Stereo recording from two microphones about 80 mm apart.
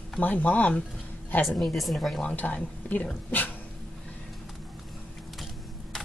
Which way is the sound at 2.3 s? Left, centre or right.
Left.